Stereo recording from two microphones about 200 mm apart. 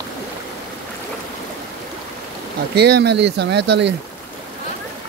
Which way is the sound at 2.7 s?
55° right (ahead or behind).